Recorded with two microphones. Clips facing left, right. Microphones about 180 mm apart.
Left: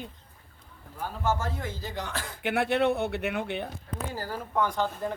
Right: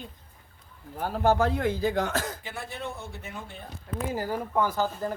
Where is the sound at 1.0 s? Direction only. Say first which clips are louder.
Right 6 dB; 60° right (ahead or behind); by 2.4 s 45° right (ahead or behind).